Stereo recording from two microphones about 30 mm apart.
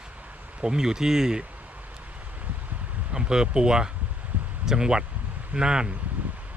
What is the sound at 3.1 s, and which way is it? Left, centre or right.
Speech, right.